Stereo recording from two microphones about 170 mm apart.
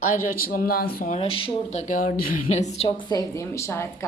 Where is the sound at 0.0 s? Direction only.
55° left (ahead or behind).